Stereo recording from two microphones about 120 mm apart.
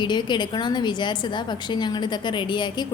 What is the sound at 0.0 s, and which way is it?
Speech, 40° left (ahead or behind).